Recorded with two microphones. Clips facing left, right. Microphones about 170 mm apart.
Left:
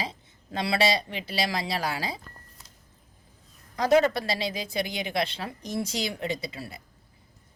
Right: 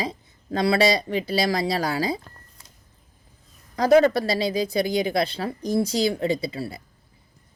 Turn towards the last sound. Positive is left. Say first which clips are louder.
# right 7 dB
turn(degrees=-30)  # may be behind; listen again after turning